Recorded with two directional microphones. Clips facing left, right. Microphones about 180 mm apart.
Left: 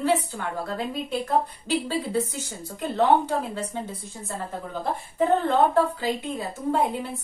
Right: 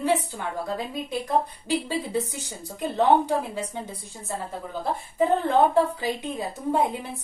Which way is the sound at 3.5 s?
10° right (ahead or behind).